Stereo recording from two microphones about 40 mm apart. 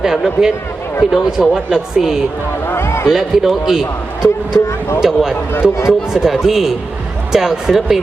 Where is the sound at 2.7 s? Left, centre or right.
Left.